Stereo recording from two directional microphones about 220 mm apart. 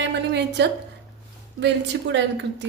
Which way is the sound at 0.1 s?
50° right (ahead or behind).